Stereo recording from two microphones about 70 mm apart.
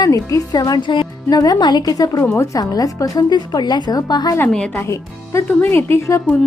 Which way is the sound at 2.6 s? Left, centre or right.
Left.